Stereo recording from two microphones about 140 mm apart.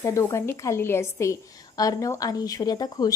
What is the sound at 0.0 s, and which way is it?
A woman's voice, 20° left (ahead or behind).